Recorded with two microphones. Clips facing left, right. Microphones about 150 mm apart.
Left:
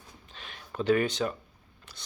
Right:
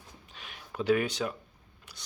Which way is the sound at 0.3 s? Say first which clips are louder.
Left 2 dB; 10° right (ahead or behind).